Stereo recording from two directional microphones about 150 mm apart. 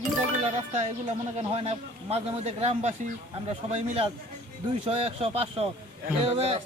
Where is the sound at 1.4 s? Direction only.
45° right (ahead or behind).